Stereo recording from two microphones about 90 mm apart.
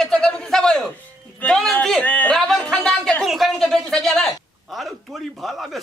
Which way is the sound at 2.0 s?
15° left (ahead or behind).